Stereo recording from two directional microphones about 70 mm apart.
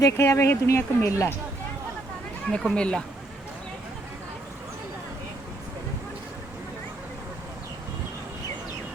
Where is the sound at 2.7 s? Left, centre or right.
Centre.